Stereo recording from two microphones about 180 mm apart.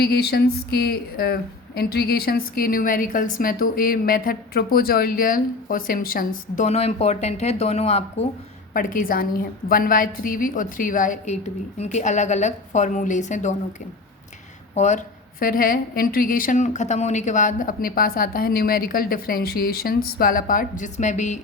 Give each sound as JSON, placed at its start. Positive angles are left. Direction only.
{"t": 0.0, "sound": "a woman's voice", "side_deg": 60}
{"t": 6.7, "sound": "a woman's voice", "side_deg": 35}
{"t": 8.7, "sound": "a woman's voice", "side_deg": 50}
{"t": 14.8, "sound": "a woman's voice", "side_deg": 40}